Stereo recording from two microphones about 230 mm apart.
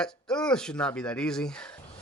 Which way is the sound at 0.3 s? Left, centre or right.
Centre.